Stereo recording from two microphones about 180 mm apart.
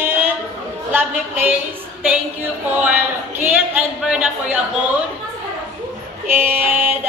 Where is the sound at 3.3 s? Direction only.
10° right (ahead or behind).